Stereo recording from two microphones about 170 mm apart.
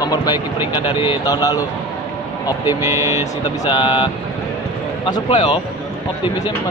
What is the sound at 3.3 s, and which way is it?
A man's voice, 25° left (ahead or behind).